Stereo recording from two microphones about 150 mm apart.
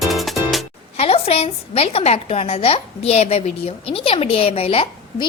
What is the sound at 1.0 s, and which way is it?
A woman's voice, 40° left (ahead or behind).